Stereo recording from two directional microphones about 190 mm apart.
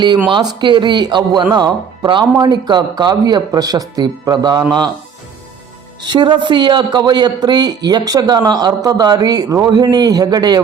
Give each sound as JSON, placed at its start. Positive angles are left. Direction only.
{"t": 0.3, "sound": "speech", "side_deg": -25}
{"t": 6.0, "sound": "speech", "side_deg": -25}